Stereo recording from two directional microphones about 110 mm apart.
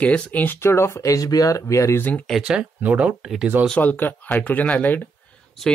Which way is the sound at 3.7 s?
15° left (ahead or behind).